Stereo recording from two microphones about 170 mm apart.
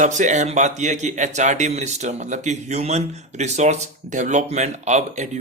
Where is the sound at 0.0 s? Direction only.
45° right (ahead or behind).